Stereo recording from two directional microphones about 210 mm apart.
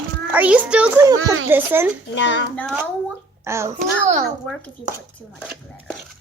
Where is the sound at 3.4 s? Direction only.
15° right (ahead or behind).